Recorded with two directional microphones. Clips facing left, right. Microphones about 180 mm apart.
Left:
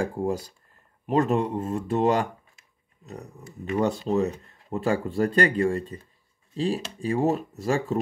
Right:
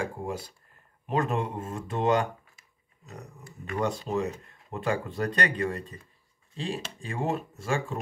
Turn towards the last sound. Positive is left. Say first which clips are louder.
# left 4 dB
turn(degrees=35)  # may be behind; listen again after turning